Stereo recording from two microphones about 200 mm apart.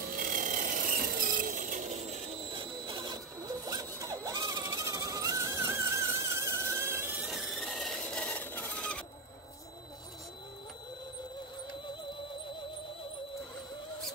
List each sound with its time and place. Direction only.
0.0 s ratchet: 45° right (ahead or behind); by 9.0 s 5° left (ahead or behind)